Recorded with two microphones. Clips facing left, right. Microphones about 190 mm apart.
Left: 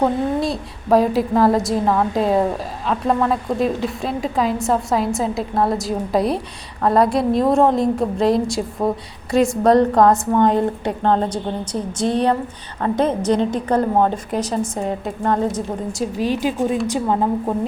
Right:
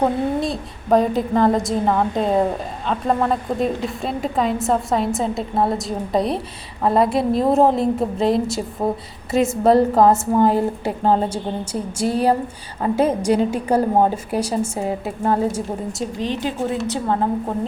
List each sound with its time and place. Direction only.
0.0 s a woman's voice: centre (ahead or behind)